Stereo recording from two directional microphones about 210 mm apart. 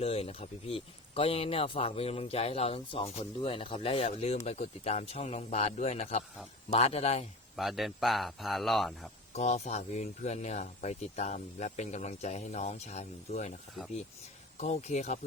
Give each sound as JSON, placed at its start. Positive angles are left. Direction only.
{"t": 0.0, "sound": "speech", "side_deg": 30}
{"t": 7.5, "sound": "a man's voice", "side_deg": 0}
{"t": 9.3, "sound": "speech", "side_deg": 30}
{"t": 14.6, "sound": "speech", "side_deg": 30}